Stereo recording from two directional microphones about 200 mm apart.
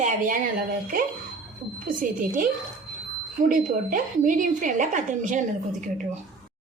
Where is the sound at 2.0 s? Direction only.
40° right (ahead or behind).